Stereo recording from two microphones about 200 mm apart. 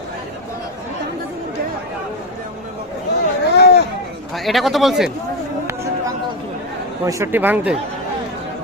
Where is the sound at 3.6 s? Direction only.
55° left (ahead or behind).